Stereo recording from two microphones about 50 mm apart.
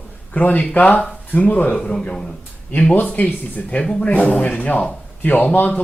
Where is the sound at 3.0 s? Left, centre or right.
Left.